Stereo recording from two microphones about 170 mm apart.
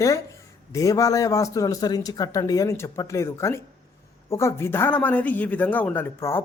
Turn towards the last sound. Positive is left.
turn(degrees=15)  # may be behind; listen again after turning